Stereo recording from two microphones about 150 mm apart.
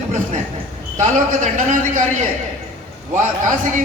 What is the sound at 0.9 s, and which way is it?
A man's voice, 55° right (ahead or behind).